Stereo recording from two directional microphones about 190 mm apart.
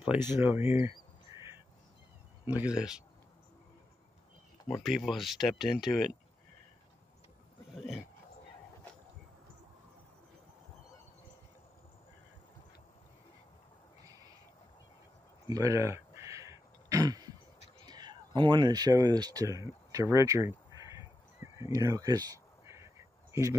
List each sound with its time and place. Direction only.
0.0 s speech: 10° right (ahead or behind)
2.4 s speech: 5° right (ahead or behind)
4.8 s speech: centre (ahead or behind)
7.7 s speech: centre (ahead or behind)
14.0 s owl: 20° right (ahead or behind)
15.5 s throat clearing: 15° right (ahead or behind)
17.8 s a sound: 20° right (ahead or behind)